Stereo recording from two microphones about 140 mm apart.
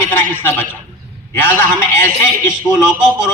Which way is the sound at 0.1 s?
15° left (ahead or behind).